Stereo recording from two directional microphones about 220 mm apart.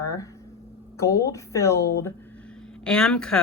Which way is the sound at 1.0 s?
15° left (ahead or behind).